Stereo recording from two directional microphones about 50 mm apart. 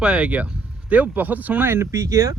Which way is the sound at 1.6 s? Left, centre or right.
Right.